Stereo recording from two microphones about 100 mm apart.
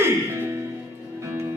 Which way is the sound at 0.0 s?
25° right (ahead or behind).